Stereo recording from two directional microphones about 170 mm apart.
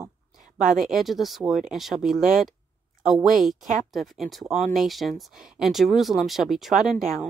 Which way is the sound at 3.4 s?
Centre (ahead or behind).